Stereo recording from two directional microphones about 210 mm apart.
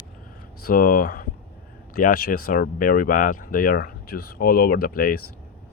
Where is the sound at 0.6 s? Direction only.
45° left (ahead or behind).